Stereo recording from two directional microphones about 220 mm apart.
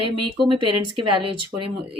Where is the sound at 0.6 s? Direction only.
90° right.